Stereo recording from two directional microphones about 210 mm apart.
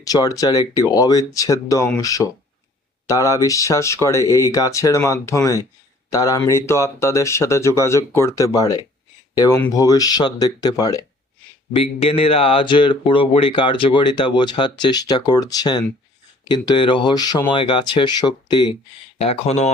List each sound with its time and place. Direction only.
0.0 s speech: 15° left (ahead or behind)